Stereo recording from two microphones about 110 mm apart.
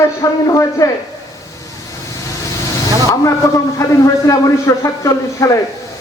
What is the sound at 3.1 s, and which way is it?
A man's voice, 30° left (ahead or behind).